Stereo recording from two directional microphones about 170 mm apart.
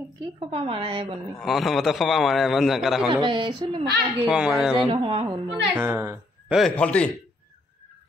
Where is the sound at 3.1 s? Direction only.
25° right (ahead or behind).